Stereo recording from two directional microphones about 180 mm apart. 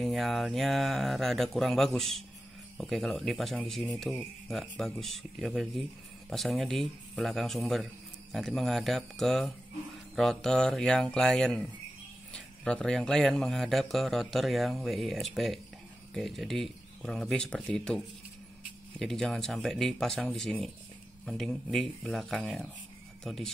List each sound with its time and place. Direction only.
0.0 s a man's voice: centre (ahead or behind)